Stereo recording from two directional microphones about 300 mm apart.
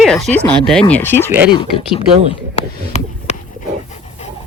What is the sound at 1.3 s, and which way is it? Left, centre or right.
Speech, centre.